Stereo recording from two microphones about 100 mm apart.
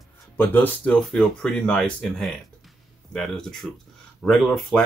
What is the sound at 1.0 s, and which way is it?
Speech, 5° left (ahead or behind).